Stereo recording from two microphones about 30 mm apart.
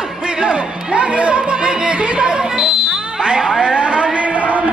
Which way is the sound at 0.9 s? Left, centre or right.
Right.